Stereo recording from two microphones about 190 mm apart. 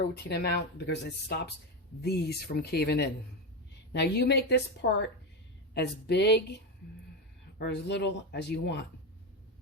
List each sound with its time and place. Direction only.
0.1 s speech: 60° left (ahead or behind)
7.6 s speech: 65° left (ahead or behind)